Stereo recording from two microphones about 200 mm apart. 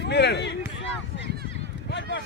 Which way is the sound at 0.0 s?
55° left (ahead or behind).